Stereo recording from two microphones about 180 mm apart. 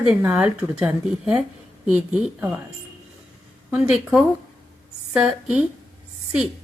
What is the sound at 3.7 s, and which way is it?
A woman's voice, 5° right (ahead or behind).